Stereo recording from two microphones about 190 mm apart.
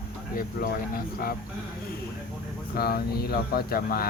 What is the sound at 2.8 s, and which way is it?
Speech, 55° left (ahead or behind).